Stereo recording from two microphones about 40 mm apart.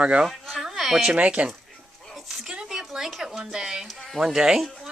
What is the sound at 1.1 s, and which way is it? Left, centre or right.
Speech, right.